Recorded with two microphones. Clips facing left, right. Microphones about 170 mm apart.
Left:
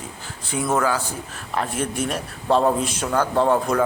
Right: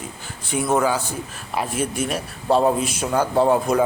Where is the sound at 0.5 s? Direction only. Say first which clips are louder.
Right 2 dB; 15° right (ahead or behind).